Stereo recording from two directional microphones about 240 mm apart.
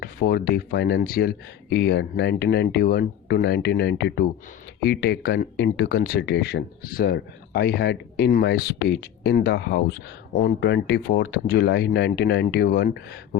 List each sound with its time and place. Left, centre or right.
0.0 s speech: left